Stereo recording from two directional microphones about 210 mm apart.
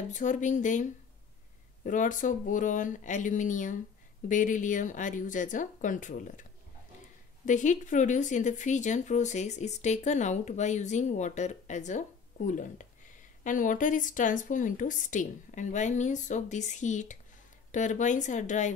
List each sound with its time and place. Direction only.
0.1 s speech: 35° left (ahead or behind)
1.9 s speech: 40° left (ahead or behind)
7.4 s speech: 35° left (ahead or behind)